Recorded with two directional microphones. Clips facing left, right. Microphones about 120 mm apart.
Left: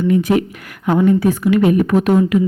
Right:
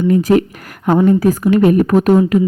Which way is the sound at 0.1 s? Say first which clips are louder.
Right 4 dB; 40° right (ahead or behind).